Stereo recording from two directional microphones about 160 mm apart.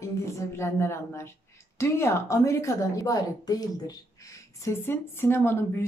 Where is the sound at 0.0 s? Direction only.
20° left (ahead or behind).